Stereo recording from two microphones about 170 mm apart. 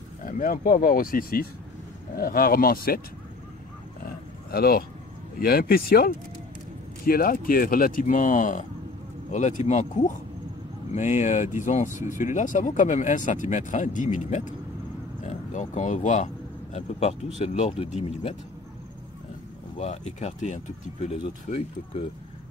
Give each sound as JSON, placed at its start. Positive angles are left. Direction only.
{"t": 0.2, "sound": "speech", "side_deg": 50}
{"t": 4.5, "sound": "speech", "side_deg": 65}
{"t": 17.4, "sound": "speech", "side_deg": 40}
{"t": 19.8, "sound": "speech", "side_deg": 40}